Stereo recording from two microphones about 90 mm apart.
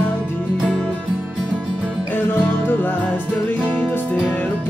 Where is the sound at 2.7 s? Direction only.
20° left (ahead or behind).